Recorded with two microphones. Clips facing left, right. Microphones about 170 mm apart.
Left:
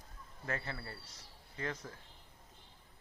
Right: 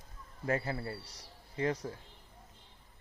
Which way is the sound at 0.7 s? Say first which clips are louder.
Right 7 dB; 30° right (ahead or behind).